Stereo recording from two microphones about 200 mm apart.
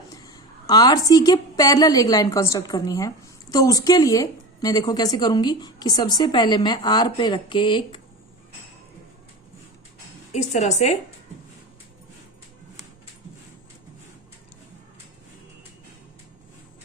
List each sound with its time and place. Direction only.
0.2 s a woman's voice: 20° left (ahead or behind)
10.3 s a woman's voice: 35° left (ahead or behind)